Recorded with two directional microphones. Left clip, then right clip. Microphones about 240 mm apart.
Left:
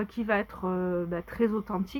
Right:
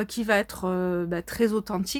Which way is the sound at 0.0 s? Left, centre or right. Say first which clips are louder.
Right 4 dB; right.